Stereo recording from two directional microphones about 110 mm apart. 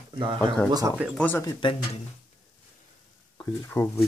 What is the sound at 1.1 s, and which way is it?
Speech, 15° left (ahead or behind).